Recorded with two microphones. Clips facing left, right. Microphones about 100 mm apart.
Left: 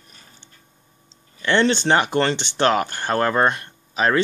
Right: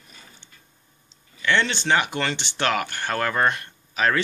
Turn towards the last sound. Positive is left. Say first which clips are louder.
# left 3 dB
turn(degrees=25)  # may be behind; listen again after turning